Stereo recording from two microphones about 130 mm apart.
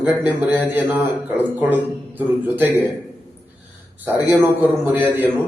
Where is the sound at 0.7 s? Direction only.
15° right (ahead or behind).